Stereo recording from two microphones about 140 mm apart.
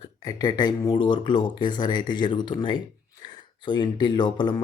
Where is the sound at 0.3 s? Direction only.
30° left (ahead or behind).